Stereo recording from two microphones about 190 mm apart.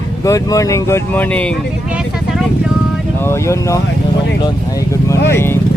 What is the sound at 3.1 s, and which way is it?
Speech, 15° left (ahead or behind).